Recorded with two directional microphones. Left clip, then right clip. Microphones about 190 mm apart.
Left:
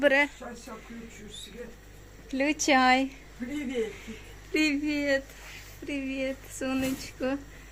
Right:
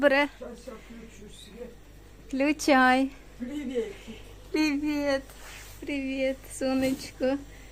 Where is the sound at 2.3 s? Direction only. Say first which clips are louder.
Right 1 dB; 15° right (ahead or behind).